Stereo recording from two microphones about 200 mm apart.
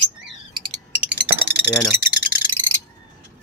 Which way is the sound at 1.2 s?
10° right (ahead or behind).